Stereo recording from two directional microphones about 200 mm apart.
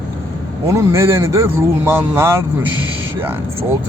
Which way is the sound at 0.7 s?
15° right (ahead or behind).